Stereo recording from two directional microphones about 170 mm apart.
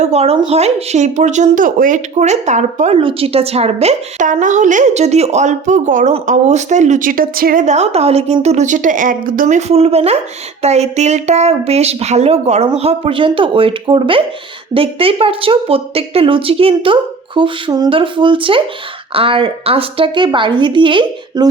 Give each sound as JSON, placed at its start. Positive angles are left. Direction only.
{"t": 0.0, "sound": "speech", "side_deg": -40}
{"t": 7.6, "sound": "a woman's voice", "side_deg": -40}